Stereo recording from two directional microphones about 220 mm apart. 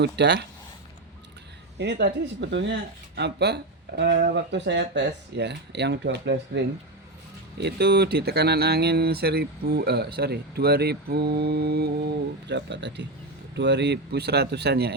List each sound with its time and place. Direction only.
0.0 s speech: 50° right (ahead or behind)
1.8 s speech: 50° right (ahead or behind)
7.6 s speech: 50° right (ahead or behind)